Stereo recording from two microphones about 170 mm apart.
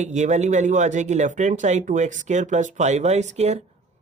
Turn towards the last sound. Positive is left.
turn(degrees=-40)  # may be behind; listen again after turning